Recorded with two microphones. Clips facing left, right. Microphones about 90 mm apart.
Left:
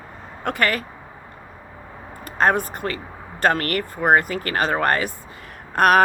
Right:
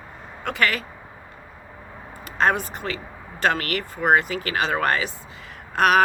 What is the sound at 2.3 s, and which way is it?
Speech, 45° left (ahead or behind).